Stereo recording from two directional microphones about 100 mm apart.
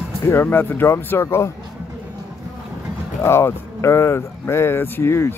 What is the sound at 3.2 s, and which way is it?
Speech, 25° left (ahead or behind).